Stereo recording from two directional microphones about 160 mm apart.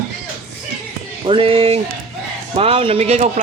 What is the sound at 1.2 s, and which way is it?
Speech, 35° right (ahead or behind).